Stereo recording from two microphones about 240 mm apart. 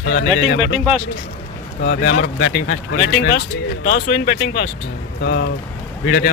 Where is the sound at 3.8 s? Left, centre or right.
Left.